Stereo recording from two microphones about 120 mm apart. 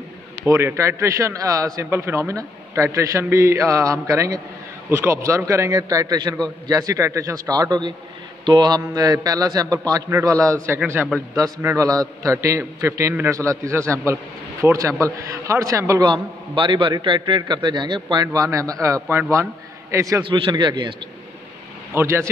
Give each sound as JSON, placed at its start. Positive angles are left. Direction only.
{"t": 0.5, "sound": "a man's voice", "side_deg": -25}
{"t": 11.0, "sound": "a man's voice", "side_deg": -10}
{"t": 11.3, "sound": "a man's voice", "side_deg": -30}
{"t": 16.1, "sound": "a man's voice", "side_deg": -45}
{"t": 20.2, "sound": "a man's voice", "side_deg": -45}
{"t": 21.9, "sound": "a man's voice", "side_deg": -20}